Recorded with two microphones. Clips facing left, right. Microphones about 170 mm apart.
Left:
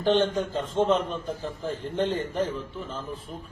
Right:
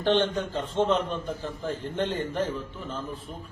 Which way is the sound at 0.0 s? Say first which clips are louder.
Left 1 dB; centre (ahead or behind).